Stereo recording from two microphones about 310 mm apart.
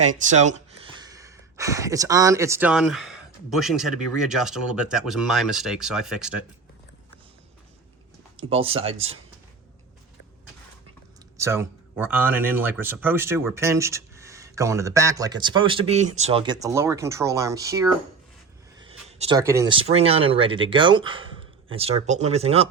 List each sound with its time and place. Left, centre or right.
0.3 s speech: right; by 6.4 s centre
8.4 s speech: centre
11.3 s speech: centre
18.8 s a sound: centre
19.9 s speech: centre